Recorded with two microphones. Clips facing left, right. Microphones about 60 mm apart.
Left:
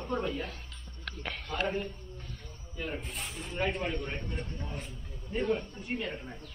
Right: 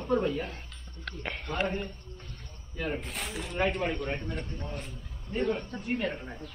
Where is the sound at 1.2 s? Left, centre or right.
Centre.